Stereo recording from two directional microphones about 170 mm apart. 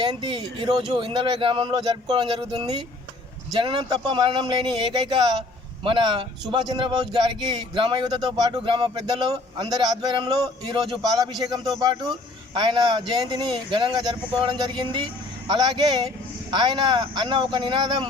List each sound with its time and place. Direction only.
0.0 s speech: 25° right (ahead or behind)